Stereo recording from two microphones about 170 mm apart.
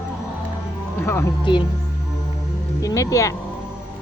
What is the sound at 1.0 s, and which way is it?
Speech, 15° left (ahead or behind).